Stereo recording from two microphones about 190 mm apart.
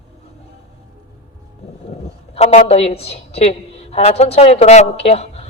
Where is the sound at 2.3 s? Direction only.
35° left (ahead or behind).